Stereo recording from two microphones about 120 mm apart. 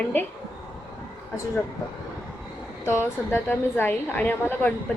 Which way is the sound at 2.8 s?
20° left (ahead or behind).